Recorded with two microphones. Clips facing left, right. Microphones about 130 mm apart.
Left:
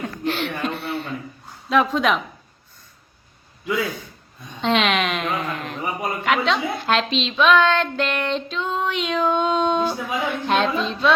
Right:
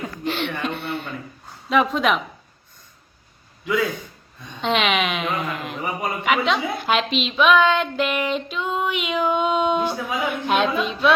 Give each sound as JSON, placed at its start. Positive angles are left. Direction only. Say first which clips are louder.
{"t": 0.0, "sound": "a sound", "louder": "left 1 dB", "side_deg": 0}
{"t": 1.7, "sound": "a woman's voice", "louder": "even", "side_deg": 0}
{"t": 4.6, "sound": "a woman's voice", "louder": "left 1 dB", "side_deg": 0}